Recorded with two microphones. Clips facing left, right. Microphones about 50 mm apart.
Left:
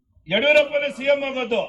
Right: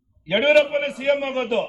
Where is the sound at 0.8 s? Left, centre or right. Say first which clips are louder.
Left 1 dB; left.